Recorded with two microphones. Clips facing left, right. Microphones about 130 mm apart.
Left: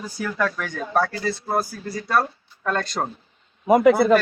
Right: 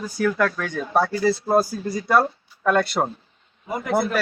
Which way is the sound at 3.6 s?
90° left.